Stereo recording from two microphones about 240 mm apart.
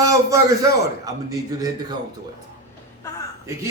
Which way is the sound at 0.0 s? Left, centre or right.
Centre.